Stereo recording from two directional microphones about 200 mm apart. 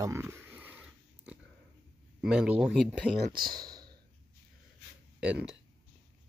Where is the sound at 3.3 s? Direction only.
20° right (ahead or behind).